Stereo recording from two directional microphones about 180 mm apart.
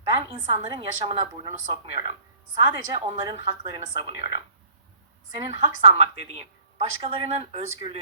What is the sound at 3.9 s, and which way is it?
Speech, 25° right (ahead or behind).